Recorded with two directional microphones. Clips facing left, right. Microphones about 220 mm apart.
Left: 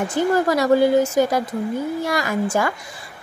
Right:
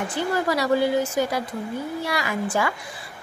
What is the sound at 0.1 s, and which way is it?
A woman's voice, 45° left (ahead or behind).